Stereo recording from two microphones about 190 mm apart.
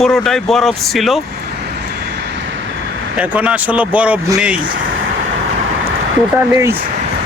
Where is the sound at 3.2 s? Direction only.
10° right (ahead or behind).